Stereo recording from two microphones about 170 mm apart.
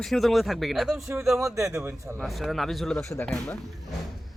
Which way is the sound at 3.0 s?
15° left (ahead or behind).